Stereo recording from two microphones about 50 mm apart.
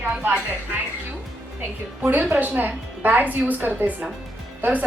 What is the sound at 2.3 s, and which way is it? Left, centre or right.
A woman's voice, right.